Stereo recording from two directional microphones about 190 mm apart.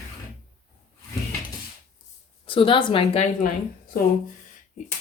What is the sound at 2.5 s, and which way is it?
Speech, 25° left (ahead or behind).